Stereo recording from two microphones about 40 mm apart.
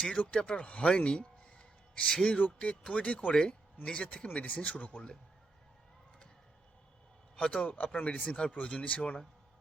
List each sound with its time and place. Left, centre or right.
0.2 s speech: left
2.4 s speech: left
4.4 s speech: left
7.4 s speech: left
7.8 s speech: left